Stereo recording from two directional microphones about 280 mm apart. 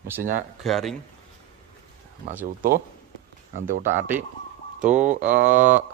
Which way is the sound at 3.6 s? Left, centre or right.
Right.